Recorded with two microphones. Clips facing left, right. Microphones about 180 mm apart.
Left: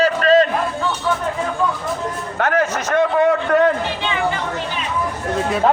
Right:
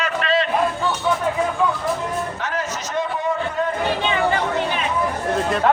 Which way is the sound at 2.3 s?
60° left (ahead or behind).